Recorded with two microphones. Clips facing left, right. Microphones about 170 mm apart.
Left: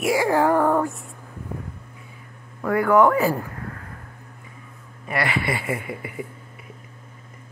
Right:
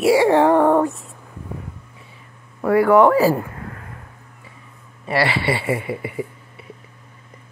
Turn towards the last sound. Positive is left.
turn(degrees=-30)  # may be behind; listen again after turning